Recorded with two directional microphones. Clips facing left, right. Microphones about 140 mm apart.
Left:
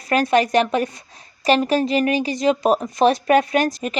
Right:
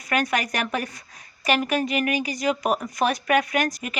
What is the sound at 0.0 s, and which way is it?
A woman's voice, 30° left (ahead or behind).